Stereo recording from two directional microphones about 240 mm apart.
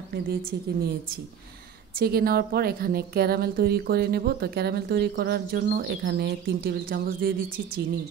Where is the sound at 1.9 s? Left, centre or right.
Right.